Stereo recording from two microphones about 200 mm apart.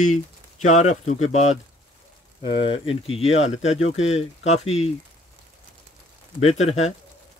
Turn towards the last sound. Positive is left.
turn(degrees=35)  # may be behind; listen again after turning